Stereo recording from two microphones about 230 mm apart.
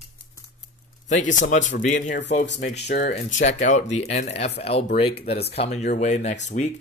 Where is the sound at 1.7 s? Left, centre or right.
Left.